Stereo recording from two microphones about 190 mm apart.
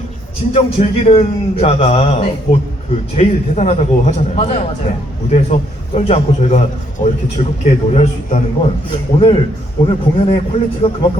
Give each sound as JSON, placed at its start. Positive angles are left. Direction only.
{"t": 0.5, "sound": "a man's voice", "side_deg": 30}
{"t": 8.9, "sound": "a man's voice", "side_deg": 25}